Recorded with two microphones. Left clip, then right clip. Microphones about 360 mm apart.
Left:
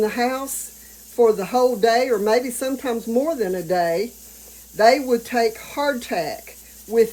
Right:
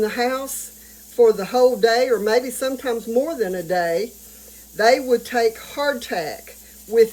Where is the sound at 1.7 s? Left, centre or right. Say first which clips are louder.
Right 1 dB; centre.